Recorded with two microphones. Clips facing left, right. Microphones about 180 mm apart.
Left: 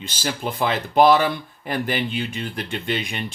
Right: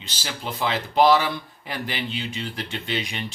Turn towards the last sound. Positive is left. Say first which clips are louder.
# left 3 dB
turn(degrees=55)  # may be behind; listen again after turning